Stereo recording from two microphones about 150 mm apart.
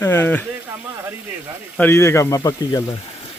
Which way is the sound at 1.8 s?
15° left (ahead or behind).